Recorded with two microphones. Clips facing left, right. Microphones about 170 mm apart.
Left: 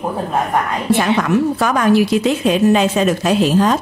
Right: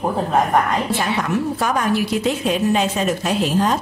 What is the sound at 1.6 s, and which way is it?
A woman's voice, 90° left.